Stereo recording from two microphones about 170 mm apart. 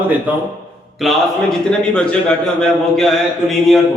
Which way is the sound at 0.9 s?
Centre (ahead or behind).